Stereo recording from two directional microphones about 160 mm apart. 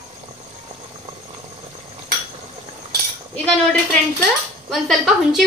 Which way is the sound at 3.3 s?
10° left (ahead or behind).